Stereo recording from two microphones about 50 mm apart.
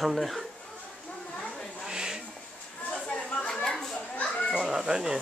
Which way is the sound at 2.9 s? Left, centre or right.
Left.